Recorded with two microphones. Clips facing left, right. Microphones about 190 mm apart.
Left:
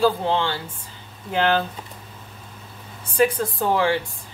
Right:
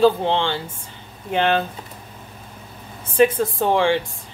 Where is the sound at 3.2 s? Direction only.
20° right (ahead or behind).